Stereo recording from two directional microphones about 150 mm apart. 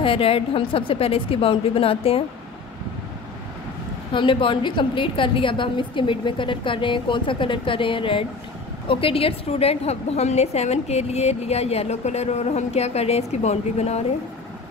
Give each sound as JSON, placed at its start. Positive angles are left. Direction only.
{"t": 0.0, "sound": "a woman's voice", "side_deg": 40}
{"t": 4.1, "sound": "a woman's voice", "side_deg": 35}